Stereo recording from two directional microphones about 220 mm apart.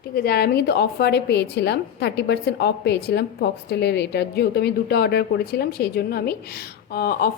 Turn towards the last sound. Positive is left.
turn(degrees=45)  # may be behind; listen again after turning